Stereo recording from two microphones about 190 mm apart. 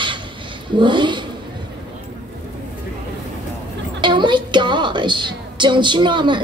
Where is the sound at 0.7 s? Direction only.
25° right (ahead or behind).